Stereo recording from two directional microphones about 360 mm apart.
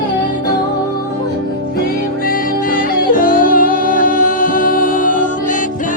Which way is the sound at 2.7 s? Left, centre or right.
Left.